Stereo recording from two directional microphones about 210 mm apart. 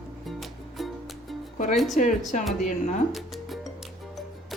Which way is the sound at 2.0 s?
35° left (ahead or behind).